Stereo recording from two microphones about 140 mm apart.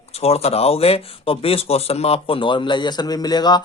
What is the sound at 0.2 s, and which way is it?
Speech, 45° left (ahead or behind).